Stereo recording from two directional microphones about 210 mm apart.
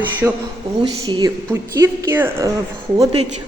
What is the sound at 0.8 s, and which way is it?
A woman's voice, 20° right (ahead or behind).